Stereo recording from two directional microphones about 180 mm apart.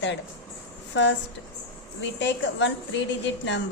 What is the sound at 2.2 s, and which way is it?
Speech, 85° left.